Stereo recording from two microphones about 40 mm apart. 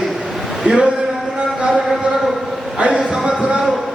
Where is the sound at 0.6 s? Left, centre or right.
Right.